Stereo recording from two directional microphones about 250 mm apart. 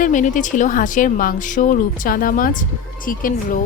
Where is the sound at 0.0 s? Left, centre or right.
Left.